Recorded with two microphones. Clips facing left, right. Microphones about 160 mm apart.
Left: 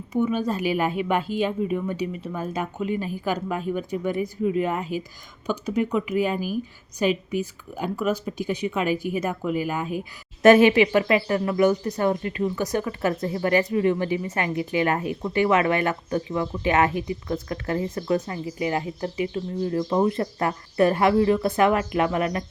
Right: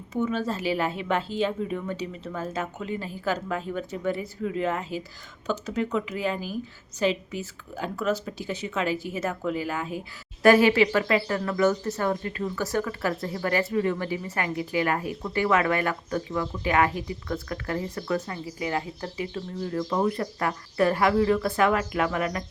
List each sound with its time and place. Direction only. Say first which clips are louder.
0.1 s speech: left 4 dB; 10° left (ahead or behind)